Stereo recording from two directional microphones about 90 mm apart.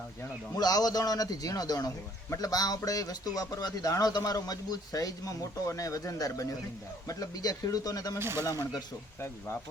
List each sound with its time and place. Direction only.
0.5 s a man's voice: 45° left (ahead or behind)
8.2 s speech: 30° right (ahead or behind)
8.4 s a man's voice: 40° left (ahead or behind)